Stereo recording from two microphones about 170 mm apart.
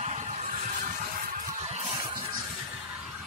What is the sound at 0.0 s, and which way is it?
Vehicle, 40° right (ahead or behind).